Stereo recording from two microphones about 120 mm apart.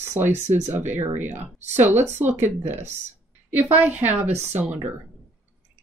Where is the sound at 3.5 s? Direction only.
15° right (ahead or behind).